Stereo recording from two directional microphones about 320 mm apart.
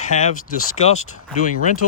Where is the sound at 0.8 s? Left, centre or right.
Left.